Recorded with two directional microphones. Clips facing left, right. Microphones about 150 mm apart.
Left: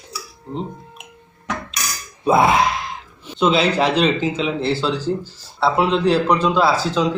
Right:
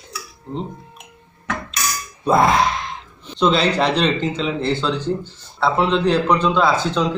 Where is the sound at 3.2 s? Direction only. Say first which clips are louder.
Even; 5° left (ahead or behind).